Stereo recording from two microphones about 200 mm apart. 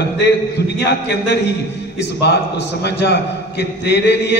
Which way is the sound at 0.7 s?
60° left (ahead or behind).